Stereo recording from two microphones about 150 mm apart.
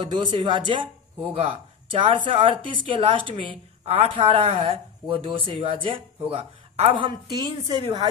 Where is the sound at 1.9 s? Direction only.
35° right (ahead or behind).